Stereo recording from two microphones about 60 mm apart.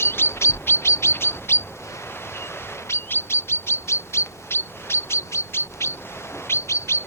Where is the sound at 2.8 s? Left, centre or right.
Left.